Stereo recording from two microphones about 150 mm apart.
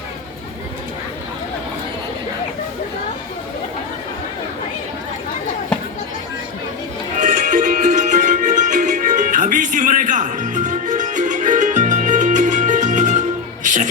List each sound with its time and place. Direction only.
7.2 s music: 60° right (ahead or behind)